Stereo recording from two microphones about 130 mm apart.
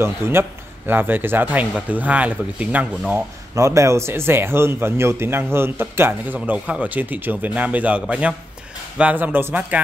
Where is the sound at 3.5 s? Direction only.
25° right (ahead or behind).